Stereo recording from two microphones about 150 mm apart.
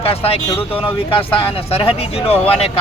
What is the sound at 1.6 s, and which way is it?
Speech, 40° left (ahead or behind).